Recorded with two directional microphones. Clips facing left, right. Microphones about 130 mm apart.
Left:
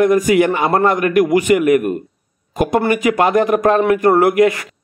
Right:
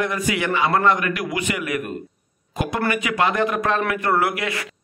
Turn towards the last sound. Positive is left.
turn(degrees=45)  # may be behind; listen again after turning